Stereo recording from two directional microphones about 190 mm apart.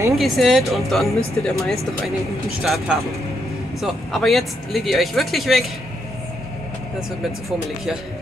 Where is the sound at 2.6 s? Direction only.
Centre (ahead or behind).